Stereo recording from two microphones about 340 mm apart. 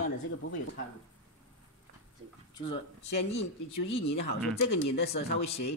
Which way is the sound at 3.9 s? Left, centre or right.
Centre.